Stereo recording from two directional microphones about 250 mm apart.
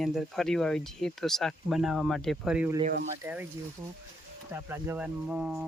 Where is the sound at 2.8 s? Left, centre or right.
Right.